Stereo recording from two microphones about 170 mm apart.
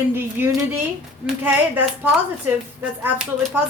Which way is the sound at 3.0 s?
10° right (ahead or behind).